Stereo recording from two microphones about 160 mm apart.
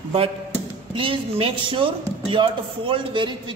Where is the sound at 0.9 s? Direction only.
35° right (ahead or behind).